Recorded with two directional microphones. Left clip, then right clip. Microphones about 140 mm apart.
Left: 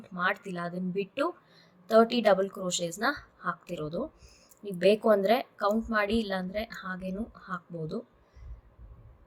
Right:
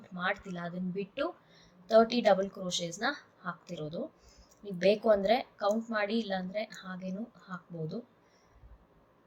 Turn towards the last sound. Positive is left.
turn(degrees=35)  # may be behind; listen again after turning